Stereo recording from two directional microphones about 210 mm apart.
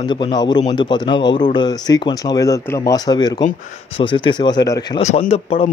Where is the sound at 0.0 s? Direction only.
20° left (ahead or behind).